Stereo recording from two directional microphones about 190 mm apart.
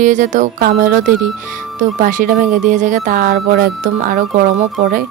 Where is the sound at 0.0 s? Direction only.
40° right (ahead or behind).